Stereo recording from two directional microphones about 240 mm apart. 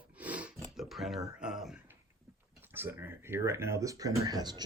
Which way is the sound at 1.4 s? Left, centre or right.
Centre.